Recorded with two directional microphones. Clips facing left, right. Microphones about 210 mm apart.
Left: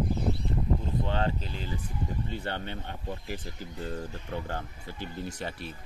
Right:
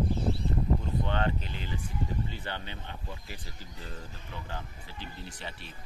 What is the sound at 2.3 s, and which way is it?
Speech, 55° left (ahead or behind).